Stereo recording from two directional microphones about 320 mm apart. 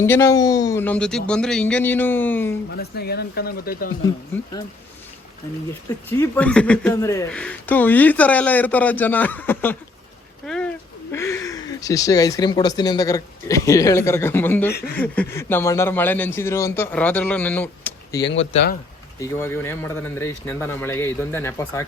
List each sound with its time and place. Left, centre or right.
0.0 s speech: centre
2.7 s speech: left
6.1 s speech: centre
18.3 s speech: left
19.2 s speech: centre